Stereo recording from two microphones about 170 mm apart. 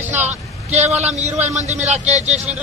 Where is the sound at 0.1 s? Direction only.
45° right (ahead or behind).